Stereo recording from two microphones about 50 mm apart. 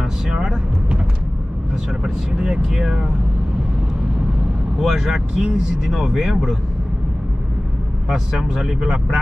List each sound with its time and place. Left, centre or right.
0.3 s music: centre
2.0 s speech: centre
4.7 s speech: centre
8.1 s speech: centre